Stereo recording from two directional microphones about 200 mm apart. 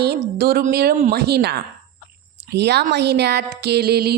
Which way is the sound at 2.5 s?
55° right (ahead or behind).